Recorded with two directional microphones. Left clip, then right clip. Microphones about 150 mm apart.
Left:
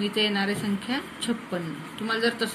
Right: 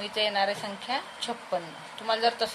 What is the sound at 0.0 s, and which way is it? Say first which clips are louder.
A woman's voice: left 1 dB; 90° right.